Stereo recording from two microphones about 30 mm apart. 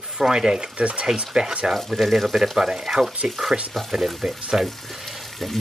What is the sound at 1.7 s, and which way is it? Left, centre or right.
Speech, centre.